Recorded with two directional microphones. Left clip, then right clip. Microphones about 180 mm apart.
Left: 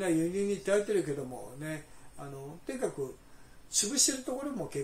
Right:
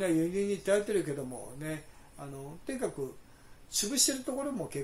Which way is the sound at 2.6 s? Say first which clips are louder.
Left 1 dB; 20° right (ahead or behind).